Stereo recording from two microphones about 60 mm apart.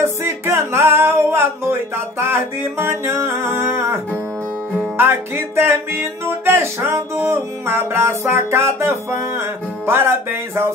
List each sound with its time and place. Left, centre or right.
0.0 s music: right